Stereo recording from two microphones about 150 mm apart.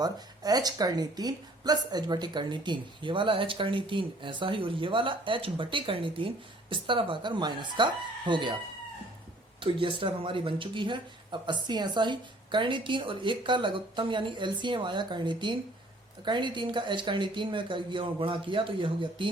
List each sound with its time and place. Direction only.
0.0 s speech: 25° right (ahead or behind)
9.6 s speech: 35° right (ahead or behind)